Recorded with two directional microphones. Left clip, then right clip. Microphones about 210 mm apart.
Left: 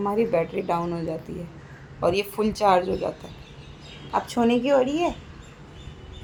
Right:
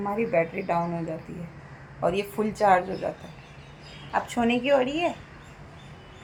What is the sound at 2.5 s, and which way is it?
Speech, 30° left (ahead or behind).